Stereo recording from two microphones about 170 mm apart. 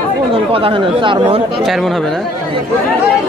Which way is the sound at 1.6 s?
Centre (ahead or behind).